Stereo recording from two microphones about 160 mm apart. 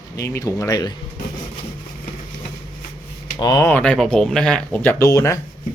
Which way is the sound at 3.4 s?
25° left (ahead or behind).